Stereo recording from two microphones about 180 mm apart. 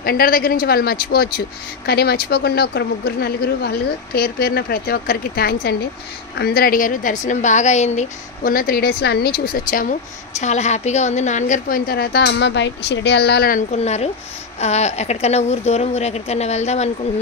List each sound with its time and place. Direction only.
0.0 s a woman's voice: 55° left (ahead or behind); by 16.9 s 40° left (ahead or behind)